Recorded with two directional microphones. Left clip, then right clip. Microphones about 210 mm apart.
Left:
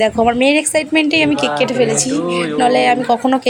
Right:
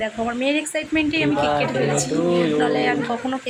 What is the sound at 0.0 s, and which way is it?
Speech, 35° left (ahead or behind).